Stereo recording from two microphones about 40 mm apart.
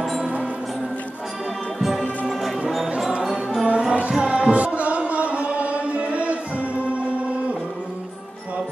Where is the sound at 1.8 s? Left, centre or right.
Centre.